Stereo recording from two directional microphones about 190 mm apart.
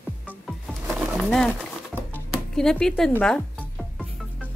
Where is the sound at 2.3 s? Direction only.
5° left (ahead or behind).